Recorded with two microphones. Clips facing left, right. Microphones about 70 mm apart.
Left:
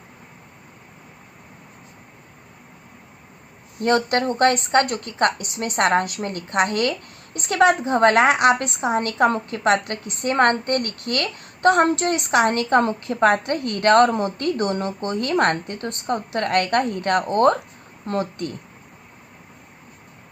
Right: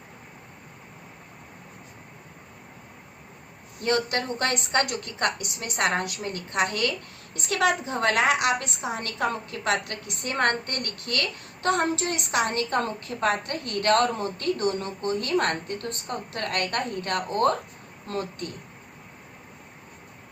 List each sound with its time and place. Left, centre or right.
3.8 s a woman's voice: left
15.4 s a woman's voice: left